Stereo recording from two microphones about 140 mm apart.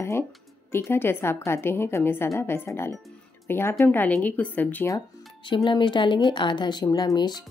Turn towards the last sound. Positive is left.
turn(degrees=30)  # may be behind; listen again after turning